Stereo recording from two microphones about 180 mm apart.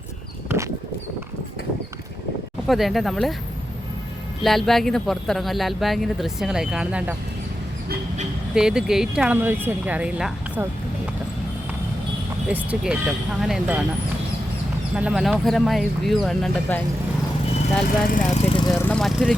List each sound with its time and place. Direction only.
0.4 s a sound: 15° right (ahead or behind)
2.6 s speech: centre (ahead or behind)
4.4 s speech: centre (ahead or behind)
8.5 s speech: 5° right (ahead or behind)
12.5 s speech: 5° right (ahead or behind)
14.9 s speech: 5° right (ahead or behind)
17.8 s speech: 50° left (ahead or behind)
18.4 s a sound: 25° left (ahead or behind)
18.8 s speech: 5° left (ahead or behind)